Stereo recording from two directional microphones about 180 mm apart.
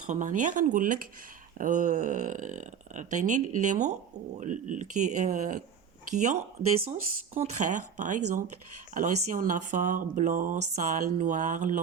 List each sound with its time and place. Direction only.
0.1 s speech: 45° right (ahead or behind)